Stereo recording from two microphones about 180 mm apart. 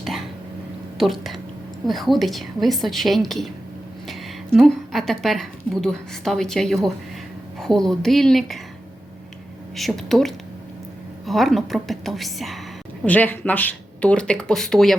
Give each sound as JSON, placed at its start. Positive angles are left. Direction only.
{"t": 0.9, "sound": "a woman's voice", "side_deg": 0}
{"t": 9.7, "sound": "speech", "side_deg": 0}